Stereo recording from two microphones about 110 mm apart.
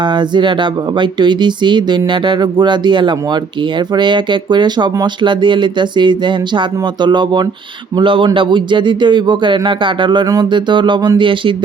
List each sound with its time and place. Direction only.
0.0 s speech: 45° right (ahead or behind)